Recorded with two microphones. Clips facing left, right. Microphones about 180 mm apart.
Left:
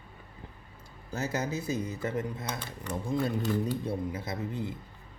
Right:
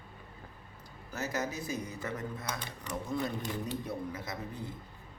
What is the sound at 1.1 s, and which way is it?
Speech, 25° left (ahead or behind).